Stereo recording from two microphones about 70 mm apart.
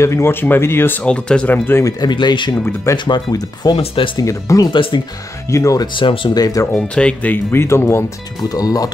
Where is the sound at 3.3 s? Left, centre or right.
Left.